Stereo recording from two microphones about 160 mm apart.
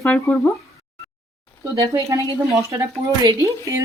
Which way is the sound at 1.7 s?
20° right (ahead or behind).